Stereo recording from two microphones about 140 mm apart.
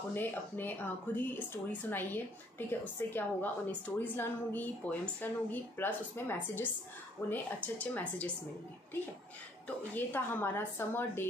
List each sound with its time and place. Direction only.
0.1 s a woman's voice: 15° left (ahead or behind)
9.9 s a woman's voice: 15° left (ahead or behind)